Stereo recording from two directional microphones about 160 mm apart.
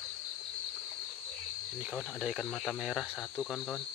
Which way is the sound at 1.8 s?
Centre (ahead or behind).